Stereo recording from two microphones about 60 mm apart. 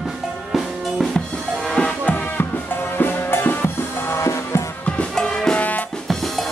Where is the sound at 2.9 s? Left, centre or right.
Left.